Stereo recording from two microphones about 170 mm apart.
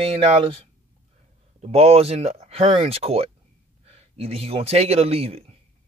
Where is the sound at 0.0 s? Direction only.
35° right (ahead or behind).